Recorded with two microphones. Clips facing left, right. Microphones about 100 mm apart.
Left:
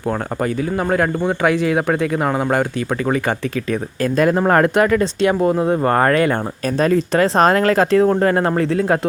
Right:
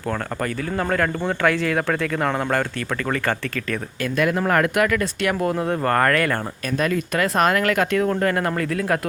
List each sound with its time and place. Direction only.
0.1 s speech: 20° left (ahead or behind)
4.0 s speech: 35° left (ahead or behind)
6.7 s speech: 35° left (ahead or behind)